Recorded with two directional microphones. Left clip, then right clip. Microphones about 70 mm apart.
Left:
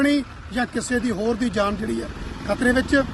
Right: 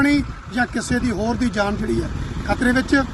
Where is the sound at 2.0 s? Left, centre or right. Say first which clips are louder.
Right 3 dB; right.